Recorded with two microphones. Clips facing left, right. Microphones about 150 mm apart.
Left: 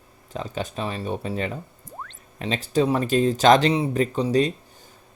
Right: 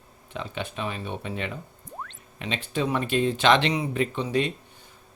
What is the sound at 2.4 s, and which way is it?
Speech, 40° left (ahead or behind).